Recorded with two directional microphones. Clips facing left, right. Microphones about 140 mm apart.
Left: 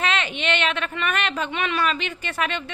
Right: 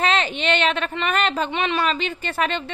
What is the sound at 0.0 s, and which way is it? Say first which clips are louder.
A child's voice: right 3 dB; 35° right (ahead or behind).